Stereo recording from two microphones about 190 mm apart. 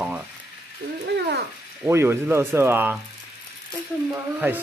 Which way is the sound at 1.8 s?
15° right (ahead or behind).